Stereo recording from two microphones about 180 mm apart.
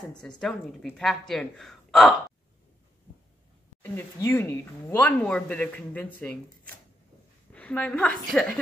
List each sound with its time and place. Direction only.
0.4 s a woman's voice: 5° left (ahead or behind)
3.8 s a woman's voice: 10° left (ahead or behind)